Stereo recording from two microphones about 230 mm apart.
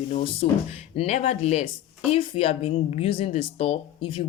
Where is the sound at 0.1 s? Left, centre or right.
Left.